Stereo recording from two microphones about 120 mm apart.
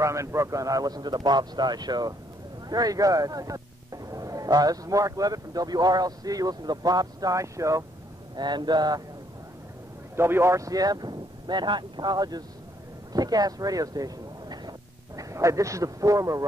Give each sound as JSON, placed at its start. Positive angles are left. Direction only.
{"t": 0.0, "sound": "speech", "side_deg": -25}
{"t": 8.4, "sound": "speech", "side_deg": -35}
{"t": 10.1, "sound": "speech", "side_deg": -20}